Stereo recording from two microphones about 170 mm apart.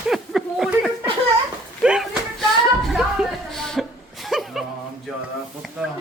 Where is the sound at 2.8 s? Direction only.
Centre (ahead or behind).